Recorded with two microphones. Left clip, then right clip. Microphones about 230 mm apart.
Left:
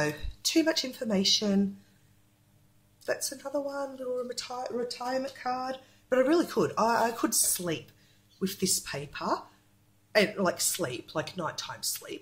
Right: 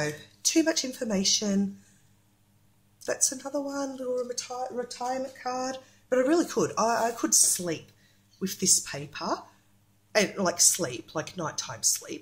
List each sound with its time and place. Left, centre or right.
0.0 s speech: centre
3.0 s speech: centre